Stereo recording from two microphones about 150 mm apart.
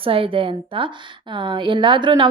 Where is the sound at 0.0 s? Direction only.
35° right (ahead or behind).